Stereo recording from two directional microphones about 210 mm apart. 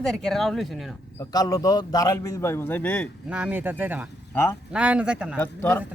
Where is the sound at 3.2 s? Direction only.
5° right (ahead or behind).